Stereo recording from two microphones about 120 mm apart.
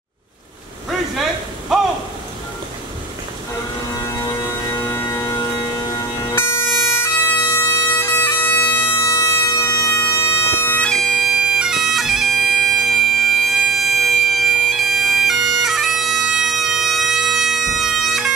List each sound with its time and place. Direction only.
4.0 s music: 25° left (ahead or behind)
6.3 s bagpipes: 20° left (ahead or behind); by 18.3 s centre (ahead or behind)